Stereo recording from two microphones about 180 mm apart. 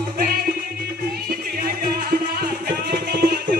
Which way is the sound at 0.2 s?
55° right (ahead or behind).